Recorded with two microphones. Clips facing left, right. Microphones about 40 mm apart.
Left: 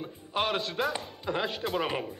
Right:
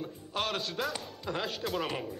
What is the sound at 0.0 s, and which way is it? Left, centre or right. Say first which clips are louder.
Speech: left 4 dB; centre.